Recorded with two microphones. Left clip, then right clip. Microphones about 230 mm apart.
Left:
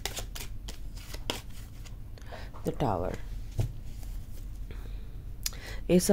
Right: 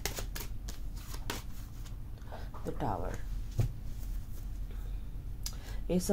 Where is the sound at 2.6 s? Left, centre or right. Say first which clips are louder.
Left 6 dB; left.